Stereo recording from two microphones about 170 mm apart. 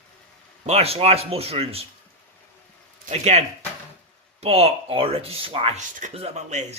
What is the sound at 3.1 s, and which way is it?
Speech, 40° right (ahead or behind).